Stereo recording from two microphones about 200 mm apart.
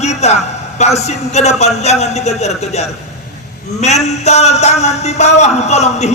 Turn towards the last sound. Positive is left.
turn(degrees=35)  # may be behind; listen again after turning